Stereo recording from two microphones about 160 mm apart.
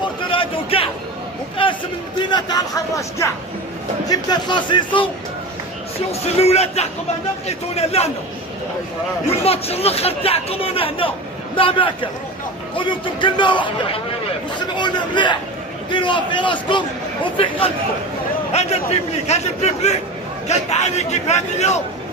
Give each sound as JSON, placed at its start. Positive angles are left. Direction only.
{"t": 0.3, "sound": "a sound", "side_deg": 35}
{"t": 2.1, "sound": "speech", "side_deg": 30}
{"t": 6.1, "sound": "speech", "side_deg": 40}
{"t": 9.4, "sound": "a man's voice", "side_deg": 40}